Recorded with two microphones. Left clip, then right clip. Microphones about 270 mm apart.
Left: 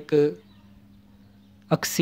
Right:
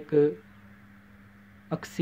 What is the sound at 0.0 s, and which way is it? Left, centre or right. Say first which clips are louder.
Speech: left 2 dB; left.